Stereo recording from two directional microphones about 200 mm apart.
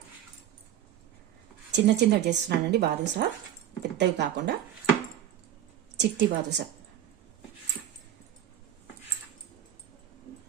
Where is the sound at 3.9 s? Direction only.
60° right (ahead or behind).